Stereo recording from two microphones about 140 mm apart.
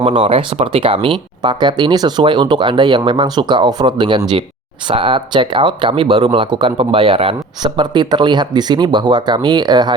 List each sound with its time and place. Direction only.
0.0 s speech: 40° right (ahead or behind)